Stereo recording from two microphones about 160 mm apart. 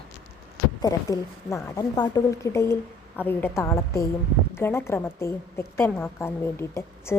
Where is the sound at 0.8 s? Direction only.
20° left (ahead or behind).